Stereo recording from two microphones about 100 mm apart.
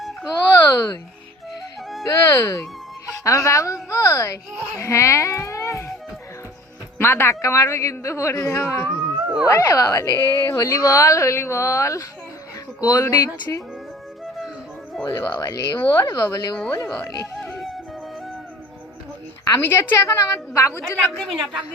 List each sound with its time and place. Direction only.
0.5 s a sound: 30° left (ahead or behind)
2.0 s a child's voice: 30° left (ahead or behind)
7.0 s a woman's voice: 25° left (ahead or behind)
15.0 s speech: 35° left (ahead or behind)
19.5 s a woman's voice: 20° left (ahead or behind)
21.2 s a woman's voice: centre (ahead or behind)